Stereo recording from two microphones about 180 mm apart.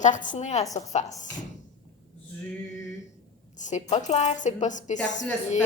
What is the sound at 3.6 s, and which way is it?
A woman's voice, 40° left (ahead or behind).